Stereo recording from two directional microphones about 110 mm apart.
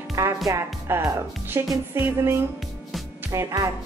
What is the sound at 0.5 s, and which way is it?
Speech, 25° right (ahead or behind).